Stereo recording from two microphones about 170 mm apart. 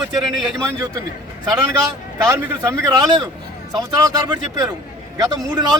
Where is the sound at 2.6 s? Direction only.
15° right (ahead or behind).